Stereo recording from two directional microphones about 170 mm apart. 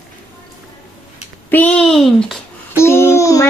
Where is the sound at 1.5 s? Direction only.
10° left (ahead or behind).